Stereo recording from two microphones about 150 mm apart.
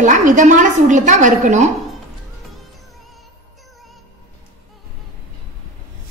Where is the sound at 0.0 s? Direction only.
55° right (ahead or behind).